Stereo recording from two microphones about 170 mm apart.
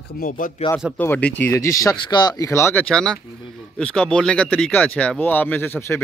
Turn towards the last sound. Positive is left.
turn(degrees=15)  # may be behind; listen again after turning